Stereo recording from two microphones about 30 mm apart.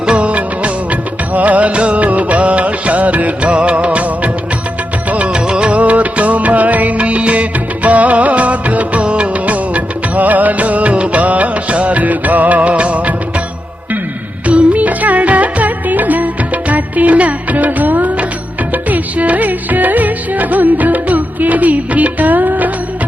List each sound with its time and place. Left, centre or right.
0.0 s music of bollywood: right
0.3 s music of bollywood: right
1.3 s music: right
1.7 s music: right
5.3 s music: right
5.7 s music: right
9.0 s music of bollywood: right
9.5 s music: right
10.9 s music: right
11.2 s music: right
14.4 s music of bollywood: right